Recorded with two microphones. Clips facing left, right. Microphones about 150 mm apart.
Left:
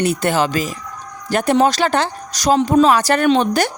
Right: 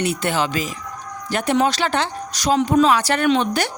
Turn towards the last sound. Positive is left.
turn(degrees=40)  # may be behind; listen again after turning